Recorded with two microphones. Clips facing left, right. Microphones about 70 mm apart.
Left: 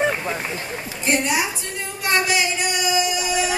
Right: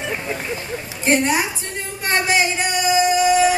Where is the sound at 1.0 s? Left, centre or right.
Right.